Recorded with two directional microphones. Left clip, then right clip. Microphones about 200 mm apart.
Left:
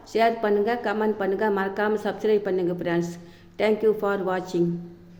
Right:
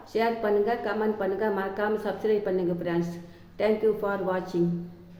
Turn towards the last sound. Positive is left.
turn(degrees=40)  # may be behind; listen again after turning